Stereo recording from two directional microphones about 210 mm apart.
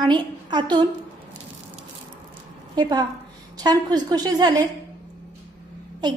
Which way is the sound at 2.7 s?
20° right (ahead or behind).